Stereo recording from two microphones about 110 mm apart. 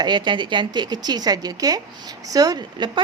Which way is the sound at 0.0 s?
40° right (ahead or behind).